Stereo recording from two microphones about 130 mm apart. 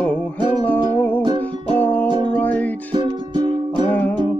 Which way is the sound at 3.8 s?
10° left (ahead or behind).